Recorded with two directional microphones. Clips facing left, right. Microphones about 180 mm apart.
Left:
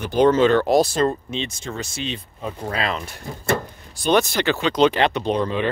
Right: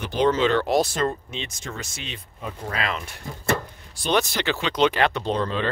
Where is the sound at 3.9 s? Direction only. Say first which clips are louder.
Left 4 dB; 50° left (ahead or behind).